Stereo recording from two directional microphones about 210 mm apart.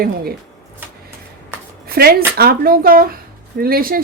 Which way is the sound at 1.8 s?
45° right (ahead or behind).